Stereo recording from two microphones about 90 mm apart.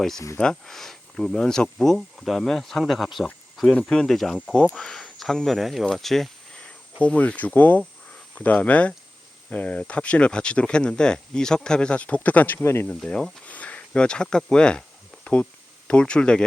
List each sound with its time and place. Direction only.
0.3 s speech: 5° left (ahead or behind)
7.0 s speech: 15° left (ahead or behind)
12.6 s speech: 30° left (ahead or behind)
12.9 s speech: 10° left (ahead or behind)